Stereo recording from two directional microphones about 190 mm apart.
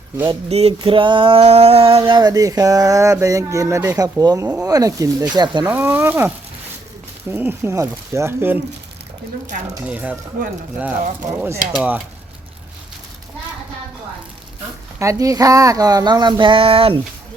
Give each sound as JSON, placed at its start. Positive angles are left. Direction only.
{"t": 0.3, "sound": "speech", "side_deg": -35}
{"t": 0.7, "sound": "a sound", "side_deg": -25}
{"t": 5.6, "sound": "speech", "side_deg": -10}
{"t": 9.8, "sound": "speech", "side_deg": -5}
{"t": 11.7, "sound": "speech", "side_deg": -5}
{"t": 14.9, "sound": "a sound", "side_deg": -15}